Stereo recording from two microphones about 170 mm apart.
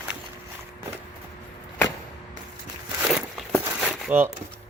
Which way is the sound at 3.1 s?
Centre (ahead or behind).